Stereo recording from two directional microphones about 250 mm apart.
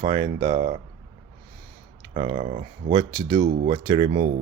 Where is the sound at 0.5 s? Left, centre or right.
Right.